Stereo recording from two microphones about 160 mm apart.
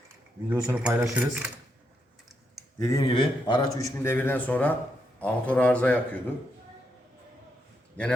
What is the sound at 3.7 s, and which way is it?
A man's voice, 20° left (ahead or behind).